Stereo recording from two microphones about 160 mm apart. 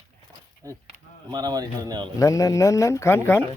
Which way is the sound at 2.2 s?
20° left (ahead or behind).